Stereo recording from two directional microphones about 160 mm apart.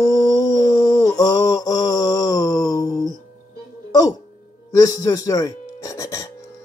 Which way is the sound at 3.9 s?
25° left (ahead or behind).